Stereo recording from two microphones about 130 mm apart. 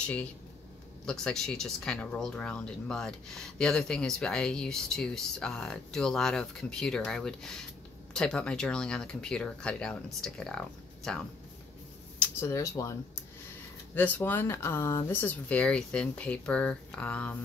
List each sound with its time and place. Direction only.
0.0 s speech: 10° left (ahead or behind)
12.4 s speech: 25° left (ahead or behind)
13.9 s speech: 15° left (ahead or behind)